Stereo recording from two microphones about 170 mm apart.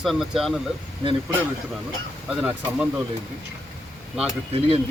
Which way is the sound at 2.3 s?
5° right (ahead or behind).